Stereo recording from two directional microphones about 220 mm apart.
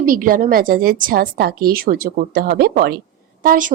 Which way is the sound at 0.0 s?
40° right (ahead or behind).